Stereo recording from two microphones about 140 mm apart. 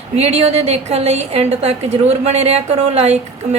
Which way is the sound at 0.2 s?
50° right (ahead or behind).